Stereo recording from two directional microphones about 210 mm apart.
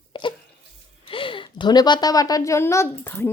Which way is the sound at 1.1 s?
25° left (ahead or behind).